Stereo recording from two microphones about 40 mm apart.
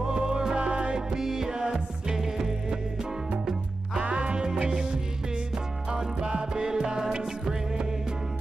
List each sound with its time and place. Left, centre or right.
0.0 s music: centre
4.0 s music: right